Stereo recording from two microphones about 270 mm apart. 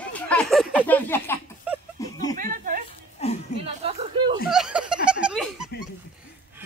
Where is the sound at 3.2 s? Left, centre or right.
Left.